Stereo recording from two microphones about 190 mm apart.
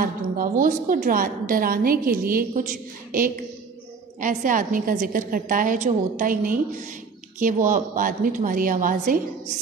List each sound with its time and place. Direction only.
0.0 s a woman's voice: 45° right (ahead or behind)